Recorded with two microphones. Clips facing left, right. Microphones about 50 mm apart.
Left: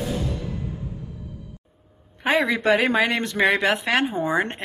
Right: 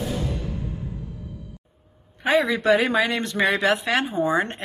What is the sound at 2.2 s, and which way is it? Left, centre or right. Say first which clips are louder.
Speech: right 1 dB; left.